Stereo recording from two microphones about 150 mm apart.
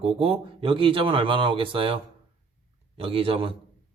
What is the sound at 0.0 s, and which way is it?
Speech, 35° right (ahead or behind).